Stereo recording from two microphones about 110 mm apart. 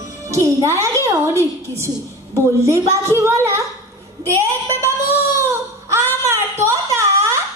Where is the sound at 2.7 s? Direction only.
25° right (ahead or behind).